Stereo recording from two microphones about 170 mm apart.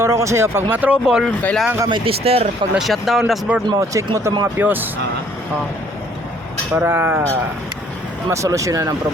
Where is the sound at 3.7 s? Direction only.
20° right (ahead or behind).